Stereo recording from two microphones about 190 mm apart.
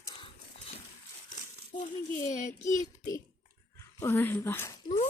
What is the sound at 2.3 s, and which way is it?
Speech, 40° left (ahead or behind).